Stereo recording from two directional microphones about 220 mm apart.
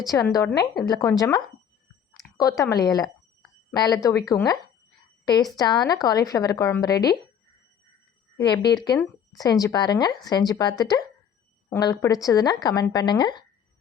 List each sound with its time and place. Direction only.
0.0 s a woman's voice: 15° left (ahead or behind)
2.4 s a woman's voice: 15° left (ahead or behind)
8.4 s a woman's voice: 20° left (ahead or behind)